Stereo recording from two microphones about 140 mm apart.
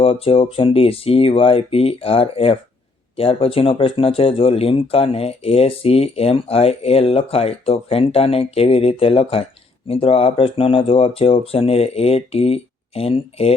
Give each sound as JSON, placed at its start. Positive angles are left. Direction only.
{"t": 0.0, "sound": "speech", "side_deg": 40}